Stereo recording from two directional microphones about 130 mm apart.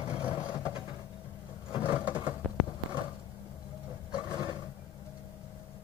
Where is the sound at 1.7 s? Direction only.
40° left (ahead or behind).